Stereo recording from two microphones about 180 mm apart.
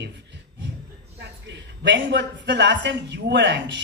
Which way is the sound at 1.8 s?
80° right.